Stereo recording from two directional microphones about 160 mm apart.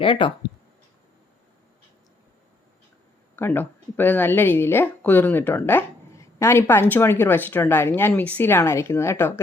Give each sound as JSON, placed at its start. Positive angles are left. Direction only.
{"t": 0.0, "sound": "speech", "side_deg": 30}
{"t": 3.3, "sound": "speech", "side_deg": 15}